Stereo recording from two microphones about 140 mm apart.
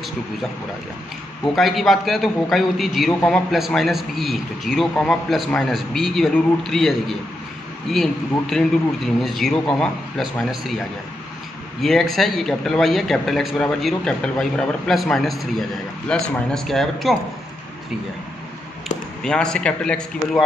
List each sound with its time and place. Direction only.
1.4 s speech: centre (ahead or behind)
11.8 s speech: centre (ahead or behind)
18.9 s speech: 5° left (ahead or behind)